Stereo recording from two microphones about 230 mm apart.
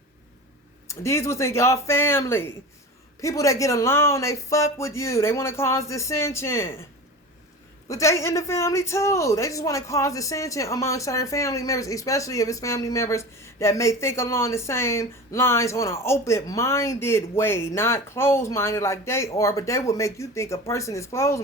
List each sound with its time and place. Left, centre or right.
0.9 s speech: centre
7.9 s speech: centre